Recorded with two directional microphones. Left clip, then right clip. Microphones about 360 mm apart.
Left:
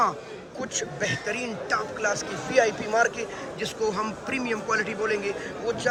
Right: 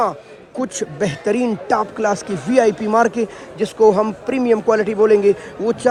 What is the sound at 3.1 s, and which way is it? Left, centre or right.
A man's voice, centre.